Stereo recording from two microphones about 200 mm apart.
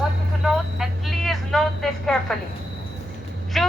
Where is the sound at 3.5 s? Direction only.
Centre (ahead or behind).